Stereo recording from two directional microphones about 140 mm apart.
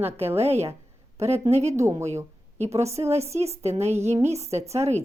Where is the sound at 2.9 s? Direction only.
50° right (ahead or behind).